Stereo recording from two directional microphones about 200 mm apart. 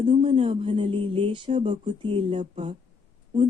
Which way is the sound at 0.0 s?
30° right (ahead or behind).